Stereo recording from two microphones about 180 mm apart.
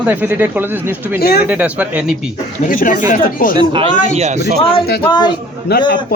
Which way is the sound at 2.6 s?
50° left (ahead or behind).